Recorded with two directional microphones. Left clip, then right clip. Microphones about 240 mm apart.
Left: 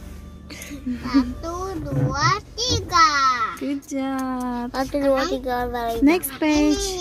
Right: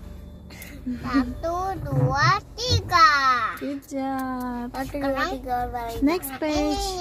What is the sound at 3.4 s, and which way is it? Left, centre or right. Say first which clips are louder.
A woman's voice: left 2 dB; centre.